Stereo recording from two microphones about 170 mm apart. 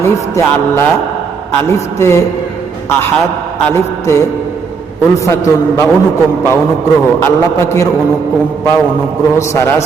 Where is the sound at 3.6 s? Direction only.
15° left (ahead or behind).